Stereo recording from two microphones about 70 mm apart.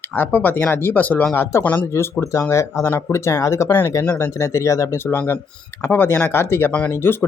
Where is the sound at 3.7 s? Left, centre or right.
Left.